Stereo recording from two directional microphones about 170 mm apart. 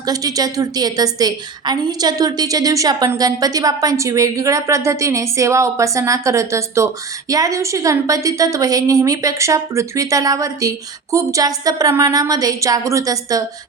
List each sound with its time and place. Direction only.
0.0 s a woman's voice: 20° right (ahead or behind)